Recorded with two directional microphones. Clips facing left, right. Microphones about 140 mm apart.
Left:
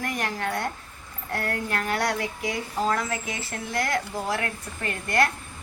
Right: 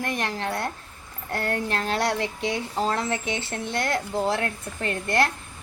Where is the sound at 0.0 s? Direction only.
25° right (ahead or behind).